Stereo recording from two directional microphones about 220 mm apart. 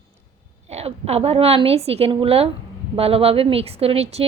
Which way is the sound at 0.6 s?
30° right (ahead or behind).